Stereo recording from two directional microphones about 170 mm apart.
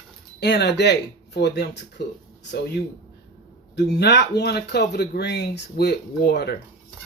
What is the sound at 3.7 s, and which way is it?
Speech, 85° left.